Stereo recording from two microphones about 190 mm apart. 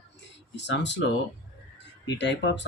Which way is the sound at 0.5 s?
65° left (ahead or behind).